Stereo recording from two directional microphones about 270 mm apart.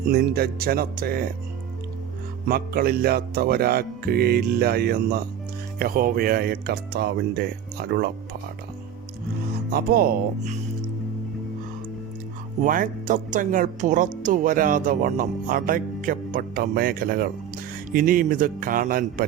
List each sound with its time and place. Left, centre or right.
0.1 s speech: right
2.5 s speech: right
9.7 s speech: right
12.6 s speech: right